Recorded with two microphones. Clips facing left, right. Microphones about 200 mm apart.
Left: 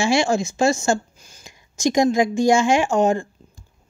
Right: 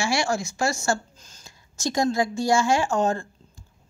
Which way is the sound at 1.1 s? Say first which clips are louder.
Left 3 dB; 10° left (ahead or behind).